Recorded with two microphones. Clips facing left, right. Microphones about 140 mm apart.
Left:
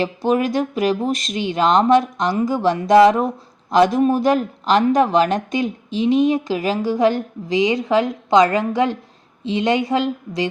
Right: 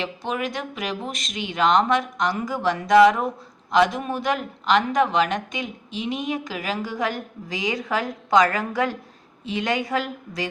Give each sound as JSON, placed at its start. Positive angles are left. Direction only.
{"t": 0.0, "sound": "a woman's voice", "side_deg": 40}